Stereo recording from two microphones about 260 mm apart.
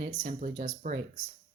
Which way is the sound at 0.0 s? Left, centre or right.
Right.